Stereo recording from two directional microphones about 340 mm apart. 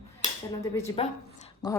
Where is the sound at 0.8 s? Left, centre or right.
Centre.